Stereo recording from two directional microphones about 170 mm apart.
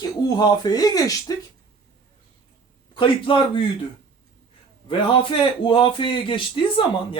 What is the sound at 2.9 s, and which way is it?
Speech, 30° left (ahead or behind).